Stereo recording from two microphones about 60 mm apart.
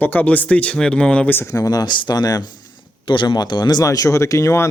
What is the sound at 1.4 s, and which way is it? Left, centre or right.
Speech, left.